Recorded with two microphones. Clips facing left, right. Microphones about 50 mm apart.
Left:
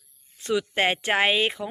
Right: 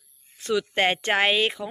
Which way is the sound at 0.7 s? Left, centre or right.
Centre.